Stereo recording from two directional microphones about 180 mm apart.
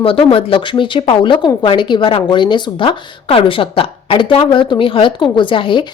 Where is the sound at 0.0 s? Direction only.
30° left (ahead or behind).